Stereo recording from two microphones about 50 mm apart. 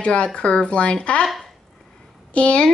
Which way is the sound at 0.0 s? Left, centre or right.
Left.